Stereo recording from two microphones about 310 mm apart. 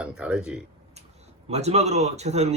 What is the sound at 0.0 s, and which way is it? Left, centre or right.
Speech, centre.